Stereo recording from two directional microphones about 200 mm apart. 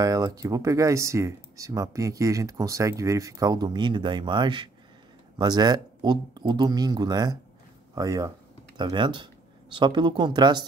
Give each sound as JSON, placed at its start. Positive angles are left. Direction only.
{"t": 0.0, "sound": "speech", "side_deg": -15}